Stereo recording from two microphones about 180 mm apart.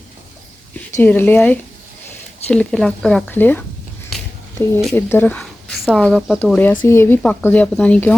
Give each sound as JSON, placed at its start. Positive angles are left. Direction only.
{"t": 0.9, "sound": "speech", "side_deg": 10}
{"t": 4.1, "sound": "a sound", "side_deg": 0}
{"t": 4.8, "sound": "speech", "side_deg": 0}
{"t": 6.4, "sound": "speech", "side_deg": 10}